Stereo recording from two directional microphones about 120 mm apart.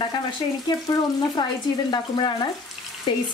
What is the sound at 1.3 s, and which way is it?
A woman's voice, 35° left (ahead or behind).